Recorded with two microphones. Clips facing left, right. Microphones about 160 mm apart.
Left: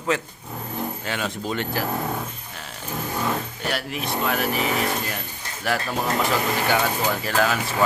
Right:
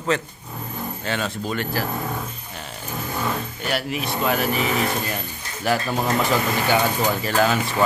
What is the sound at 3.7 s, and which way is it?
Speech, centre (ahead or behind).